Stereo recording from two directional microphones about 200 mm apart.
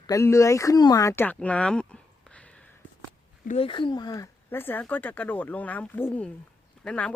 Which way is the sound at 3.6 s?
25° left (ahead or behind).